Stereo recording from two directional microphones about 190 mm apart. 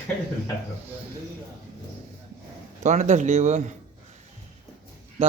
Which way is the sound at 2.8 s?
40° right (ahead or behind).